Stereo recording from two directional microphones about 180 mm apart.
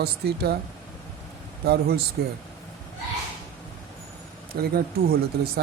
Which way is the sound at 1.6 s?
60° right (ahead or behind).